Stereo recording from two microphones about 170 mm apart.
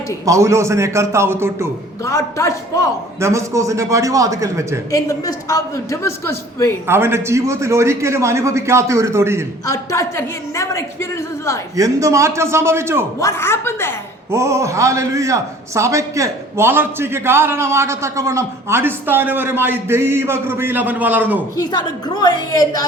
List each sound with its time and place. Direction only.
0.3 s a man's voice: 20° right (ahead or behind)
2.0 s a man's voice: 15° left (ahead or behind)
3.2 s a man's voice: 15° right (ahead or behind)
4.9 s a man's voice: 20° left (ahead or behind)
6.8 s a man's voice: 15° right (ahead or behind)
9.6 s a man's voice: 15° left (ahead or behind)
11.8 s a man's voice: 20° right (ahead or behind)
13.1 s a man's voice: 15° left (ahead or behind)
14.3 s a man's voice: 15° right (ahead or behind)
21.5 s a woman's voice: 25° left (ahead or behind)